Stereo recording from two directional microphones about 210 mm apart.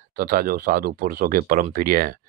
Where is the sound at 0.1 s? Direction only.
45° right (ahead or behind).